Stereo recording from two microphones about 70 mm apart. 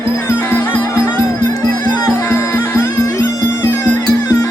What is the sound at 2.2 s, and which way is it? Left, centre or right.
Music, left.